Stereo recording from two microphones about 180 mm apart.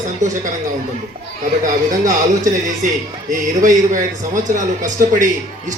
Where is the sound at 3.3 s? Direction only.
45° right (ahead or behind).